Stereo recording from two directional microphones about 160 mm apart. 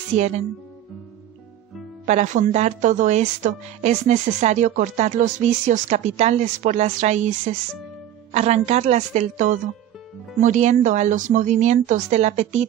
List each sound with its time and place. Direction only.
0.1 s a woman's voice: 45° right (ahead or behind)
2.0 s a woman's voice: 50° right (ahead or behind)